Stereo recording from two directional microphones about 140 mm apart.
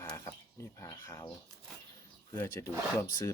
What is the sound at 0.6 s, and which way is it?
Speech, 20° left (ahead or behind).